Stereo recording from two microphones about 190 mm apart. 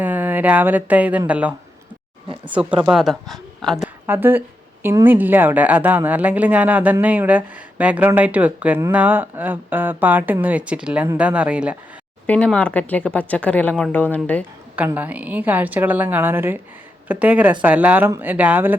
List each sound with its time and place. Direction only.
0.0 s a woman's voice: 10° right (ahead or behind)
4.0 s a woman's voice: 10° right (ahead or behind)
12.2 s speech: 5° left (ahead or behind)
14.8 s a woman's voice: 10° right (ahead or behind)